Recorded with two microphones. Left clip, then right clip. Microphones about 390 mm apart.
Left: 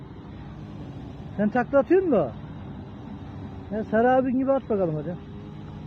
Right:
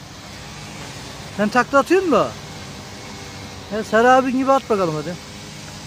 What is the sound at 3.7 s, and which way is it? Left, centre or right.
Speech, centre.